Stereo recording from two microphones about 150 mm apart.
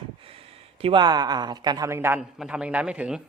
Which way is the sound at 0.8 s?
35° right (ahead or behind).